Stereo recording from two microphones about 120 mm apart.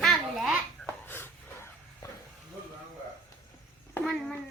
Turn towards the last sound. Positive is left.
turn(degrees=5)  # may be behind; listen again after turning